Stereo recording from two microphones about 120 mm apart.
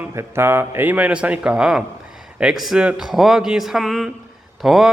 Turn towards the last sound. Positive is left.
turn(degrees=0)  # may be behind; listen again after turning